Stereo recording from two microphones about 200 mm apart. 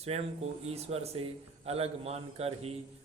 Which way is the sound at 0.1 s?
30° right (ahead or behind).